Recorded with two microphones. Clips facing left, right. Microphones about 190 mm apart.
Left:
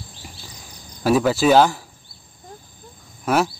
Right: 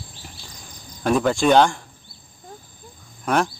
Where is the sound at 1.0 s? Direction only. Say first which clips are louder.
Left 2 dB; 5° left (ahead or behind).